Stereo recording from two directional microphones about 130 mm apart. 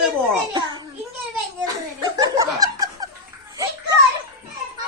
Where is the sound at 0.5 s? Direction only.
35° right (ahead or behind).